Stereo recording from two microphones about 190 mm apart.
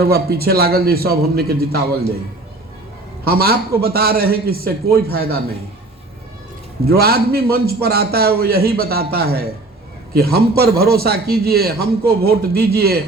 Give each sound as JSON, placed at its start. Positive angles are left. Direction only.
{"t": 0.0, "sound": "a man's voice", "side_deg": -55}
{"t": 3.2, "sound": "a man's voice", "side_deg": -55}
{"t": 6.8, "sound": "a man's voice", "side_deg": -55}